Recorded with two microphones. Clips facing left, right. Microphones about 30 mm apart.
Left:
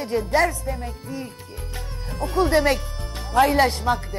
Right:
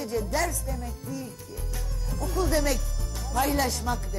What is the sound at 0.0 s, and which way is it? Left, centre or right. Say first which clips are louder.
Speech: left 7 dB; left.